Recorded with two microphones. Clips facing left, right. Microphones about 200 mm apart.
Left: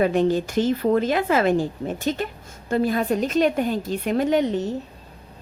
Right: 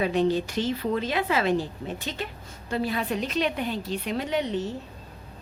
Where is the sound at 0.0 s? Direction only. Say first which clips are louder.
Left 4 dB; 50° left (ahead or behind).